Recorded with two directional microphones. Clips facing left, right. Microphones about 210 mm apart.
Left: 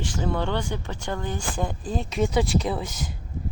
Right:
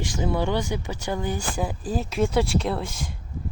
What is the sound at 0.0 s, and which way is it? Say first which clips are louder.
Speech: right 2 dB; 10° right (ahead or behind).